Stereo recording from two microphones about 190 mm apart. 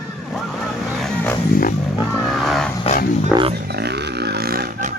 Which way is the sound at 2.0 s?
15° left (ahead or behind).